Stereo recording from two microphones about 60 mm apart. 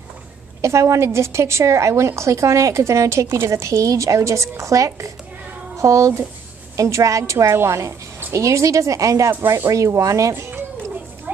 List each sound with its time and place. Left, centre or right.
0.6 s a woman's voice: right
11.3 s children playing: right